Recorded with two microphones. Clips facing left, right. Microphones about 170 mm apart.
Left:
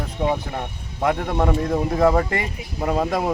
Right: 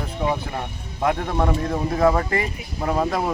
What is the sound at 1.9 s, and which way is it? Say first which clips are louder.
Speech: even; 15° left (ahead or behind).